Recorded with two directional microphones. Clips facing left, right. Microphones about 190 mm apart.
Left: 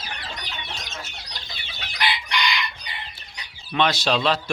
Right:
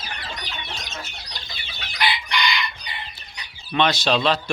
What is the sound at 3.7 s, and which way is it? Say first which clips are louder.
Speech: right 1 dB; 5° left (ahead or behind).